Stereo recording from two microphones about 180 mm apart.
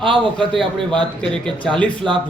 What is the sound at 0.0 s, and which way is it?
Speech, 25° right (ahead or behind).